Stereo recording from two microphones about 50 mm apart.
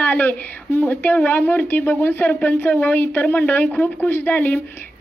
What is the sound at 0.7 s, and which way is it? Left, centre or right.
Speech, left.